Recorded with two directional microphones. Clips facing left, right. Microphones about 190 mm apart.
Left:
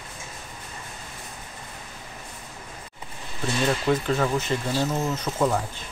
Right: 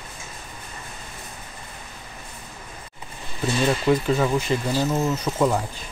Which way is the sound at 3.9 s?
10° right (ahead or behind).